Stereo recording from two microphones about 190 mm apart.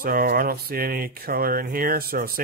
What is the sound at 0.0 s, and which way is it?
Speech, 50° right (ahead or behind).